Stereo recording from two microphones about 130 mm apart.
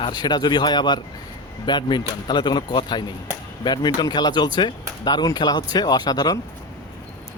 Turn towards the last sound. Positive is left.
turn(degrees=30)  # may be behind; listen again after turning